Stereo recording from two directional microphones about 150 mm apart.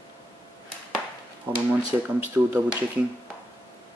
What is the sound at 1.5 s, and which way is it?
Speech, 10° right (ahead or behind).